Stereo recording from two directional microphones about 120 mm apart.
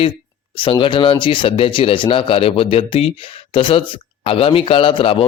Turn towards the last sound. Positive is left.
turn(degrees=45)  # may be behind; listen again after turning